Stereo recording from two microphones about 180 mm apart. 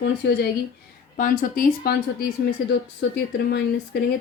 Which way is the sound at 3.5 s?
65° left (ahead or behind).